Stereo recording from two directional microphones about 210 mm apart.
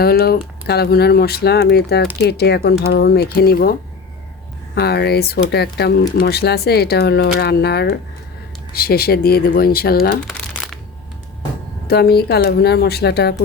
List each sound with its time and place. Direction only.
0.0 s speech: 50° left (ahead or behind)
10.2 s crumpling: centre (ahead or behind)
11.9 s speech: 50° left (ahead or behind)